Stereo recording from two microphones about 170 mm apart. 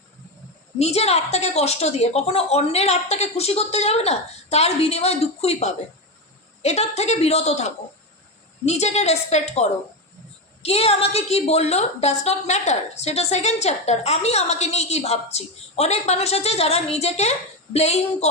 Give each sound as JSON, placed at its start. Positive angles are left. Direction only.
{"t": 0.8, "sound": "a woman's voice", "side_deg": 40}